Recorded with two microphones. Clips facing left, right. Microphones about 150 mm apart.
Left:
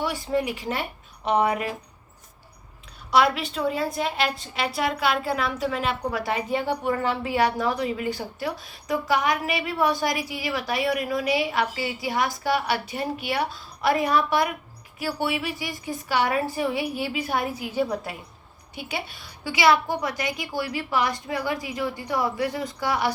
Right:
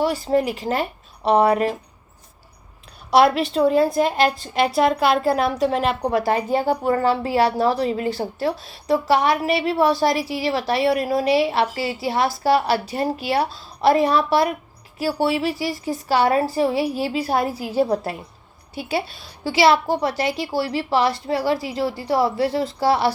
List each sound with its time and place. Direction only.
0.0 s a woman's voice: 35° right (ahead or behind)
3.1 s a woman's voice: 35° right (ahead or behind)